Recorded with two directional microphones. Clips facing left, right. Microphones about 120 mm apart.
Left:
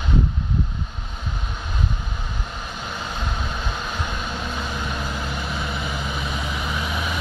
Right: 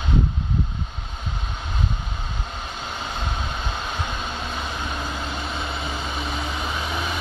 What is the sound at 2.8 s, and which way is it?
Vehicle, 25° right (ahead or behind).